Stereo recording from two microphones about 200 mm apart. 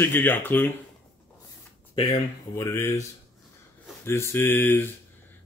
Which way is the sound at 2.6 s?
15° left (ahead or behind).